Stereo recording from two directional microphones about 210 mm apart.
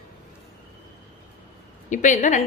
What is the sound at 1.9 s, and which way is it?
Speech, 35° left (ahead or behind).